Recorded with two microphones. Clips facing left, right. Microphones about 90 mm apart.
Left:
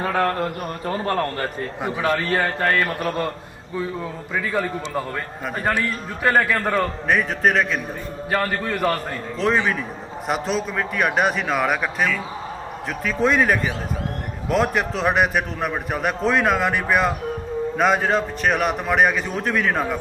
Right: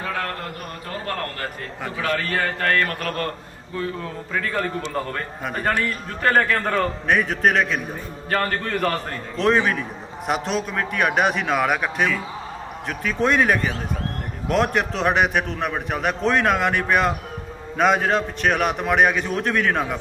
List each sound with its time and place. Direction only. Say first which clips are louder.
0.0 s a man's voice: left 6 dB; 30° left (ahead or behind); by 20.0 s centre (ahead or behind)